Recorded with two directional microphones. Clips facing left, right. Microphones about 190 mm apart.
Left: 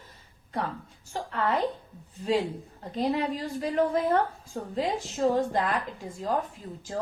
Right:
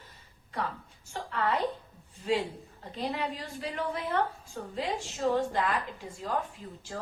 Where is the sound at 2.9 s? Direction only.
40° left (ahead or behind).